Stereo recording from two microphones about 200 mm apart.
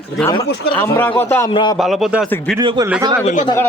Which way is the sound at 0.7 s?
10° left (ahead or behind).